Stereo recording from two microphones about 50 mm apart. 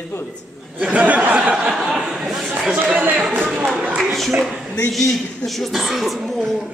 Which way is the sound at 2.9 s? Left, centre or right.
Right.